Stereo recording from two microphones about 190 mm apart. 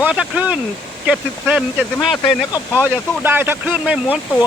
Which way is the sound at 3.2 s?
10° right (ahead or behind).